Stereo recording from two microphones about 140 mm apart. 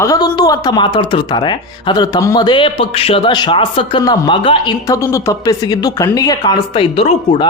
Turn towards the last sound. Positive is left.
turn(degrees=45)  # may be behind; listen again after turning